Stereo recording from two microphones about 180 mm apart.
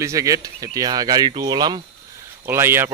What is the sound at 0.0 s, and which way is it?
Speech, 20° right (ahead or behind).